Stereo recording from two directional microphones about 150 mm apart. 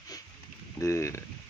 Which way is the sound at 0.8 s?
20° left (ahead or behind).